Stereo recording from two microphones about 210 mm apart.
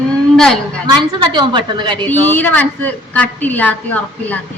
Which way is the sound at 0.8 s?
20° right (ahead or behind).